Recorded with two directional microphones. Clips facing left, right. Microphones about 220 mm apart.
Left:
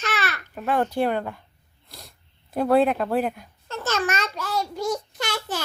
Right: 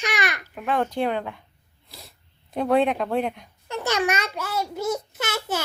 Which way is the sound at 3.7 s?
15° right (ahead or behind).